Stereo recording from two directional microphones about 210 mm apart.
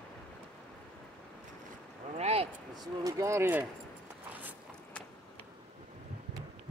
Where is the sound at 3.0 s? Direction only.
15° right (ahead or behind).